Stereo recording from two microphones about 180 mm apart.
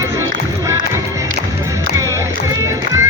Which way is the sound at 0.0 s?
15° right (ahead or behind).